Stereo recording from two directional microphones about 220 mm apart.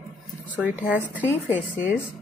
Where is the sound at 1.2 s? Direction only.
10° left (ahead or behind).